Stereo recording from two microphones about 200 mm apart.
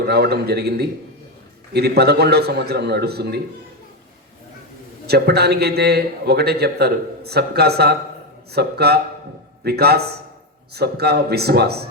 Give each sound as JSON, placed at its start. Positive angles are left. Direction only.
{"t": 0.0, "sound": "a man's voice", "side_deg": -55}
{"t": 5.0, "sound": "a man's voice", "side_deg": -55}